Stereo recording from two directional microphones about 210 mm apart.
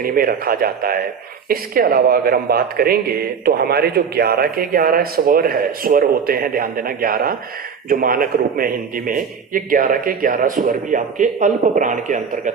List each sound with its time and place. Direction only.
0.0 s a man's voice: 45° right (ahead or behind)